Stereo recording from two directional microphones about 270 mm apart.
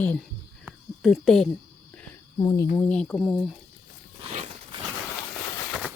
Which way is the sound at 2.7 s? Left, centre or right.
Centre.